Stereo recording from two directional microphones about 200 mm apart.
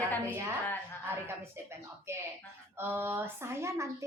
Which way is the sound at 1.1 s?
10° right (ahead or behind).